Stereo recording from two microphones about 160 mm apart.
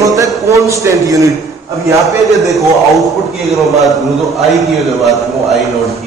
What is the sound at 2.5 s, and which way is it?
A man's voice, centre (ahead or behind).